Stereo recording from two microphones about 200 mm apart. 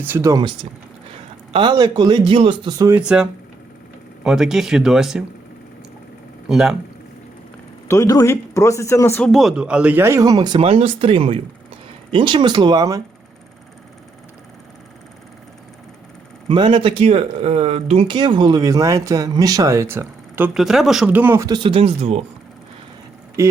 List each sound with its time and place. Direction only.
0.0 s speech: 15° right (ahead or behind)
3.0 s speech: 5° right (ahead or behind)
6.5 s speech: centre (ahead or behind)
7.9 s speech: 15° left (ahead or behind); by 13.0 s 20° right (ahead or behind)
16.5 s speech: 25° right (ahead or behind)
23.4 s speech: 15° right (ahead or behind)